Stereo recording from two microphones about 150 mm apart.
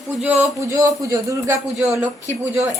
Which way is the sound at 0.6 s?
20° right (ahead or behind).